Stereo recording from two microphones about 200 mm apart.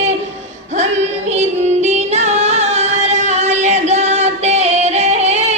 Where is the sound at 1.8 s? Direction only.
35° right (ahead or behind).